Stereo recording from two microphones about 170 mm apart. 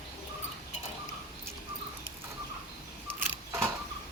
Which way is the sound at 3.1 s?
10° right (ahead or behind).